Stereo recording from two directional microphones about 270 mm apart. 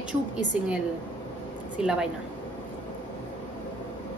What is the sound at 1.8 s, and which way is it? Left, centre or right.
Speech, centre.